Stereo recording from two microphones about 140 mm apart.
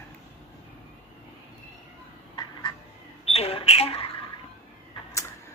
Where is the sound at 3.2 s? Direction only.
45° left (ahead or behind).